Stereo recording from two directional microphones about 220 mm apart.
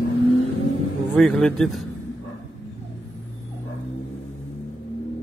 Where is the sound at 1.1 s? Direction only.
Centre (ahead or behind).